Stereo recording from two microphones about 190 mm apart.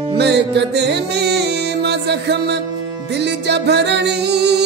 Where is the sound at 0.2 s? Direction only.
65° right (ahead or behind).